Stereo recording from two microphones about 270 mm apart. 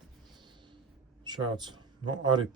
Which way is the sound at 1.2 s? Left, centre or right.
Centre.